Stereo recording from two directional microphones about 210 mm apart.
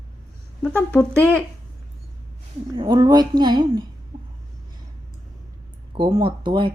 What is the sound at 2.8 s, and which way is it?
A woman's voice, 20° right (ahead or behind).